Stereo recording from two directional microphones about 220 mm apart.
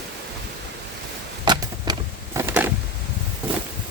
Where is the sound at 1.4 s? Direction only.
20° right (ahead or behind).